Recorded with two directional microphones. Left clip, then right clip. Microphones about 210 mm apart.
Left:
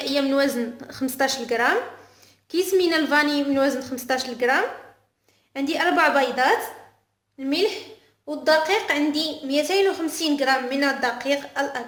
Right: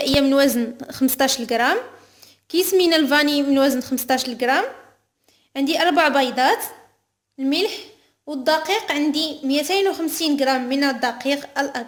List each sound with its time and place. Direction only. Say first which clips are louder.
0.0 s a woman's voice: right 5 dB; 45° right (ahead or behind)